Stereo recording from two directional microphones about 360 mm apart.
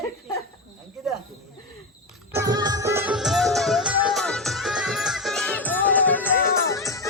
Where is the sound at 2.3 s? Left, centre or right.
Centre.